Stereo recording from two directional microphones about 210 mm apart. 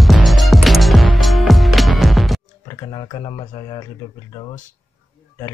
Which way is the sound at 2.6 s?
20° left (ahead or behind).